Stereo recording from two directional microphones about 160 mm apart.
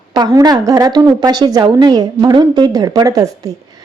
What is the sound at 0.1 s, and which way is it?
A woman's voice, 25° right (ahead or behind).